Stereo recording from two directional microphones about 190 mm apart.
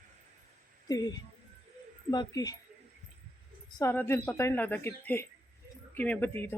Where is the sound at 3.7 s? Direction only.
15° left (ahead or behind).